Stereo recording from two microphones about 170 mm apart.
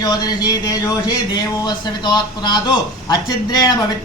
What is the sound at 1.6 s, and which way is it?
A man's voice, 25° left (ahead or behind).